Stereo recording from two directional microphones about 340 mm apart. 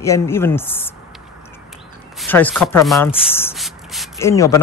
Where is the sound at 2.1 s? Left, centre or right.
Centre.